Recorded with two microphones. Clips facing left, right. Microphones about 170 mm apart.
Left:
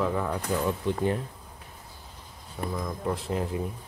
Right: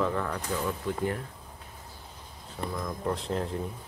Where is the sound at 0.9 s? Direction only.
25° left (ahead or behind).